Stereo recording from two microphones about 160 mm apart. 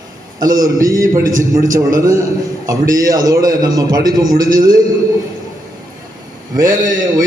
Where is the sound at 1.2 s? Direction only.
55° right (ahead or behind).